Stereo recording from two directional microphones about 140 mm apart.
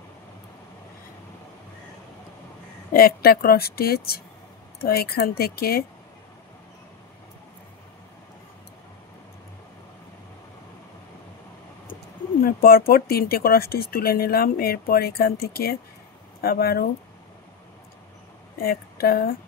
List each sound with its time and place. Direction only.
2.9 s speech: 90° left
12.4 s speech: 90° left
18.6 s speech: 90° left